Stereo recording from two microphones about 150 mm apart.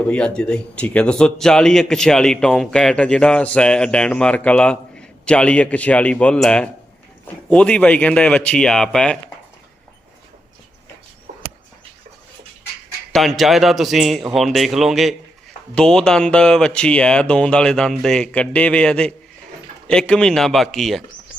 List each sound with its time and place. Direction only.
0.1 s a man's voice: 5° left (ahead or behind)
11.3 s a sound: 60° right (ahead or behind)
13.1 s speech: centre (ahead or behind)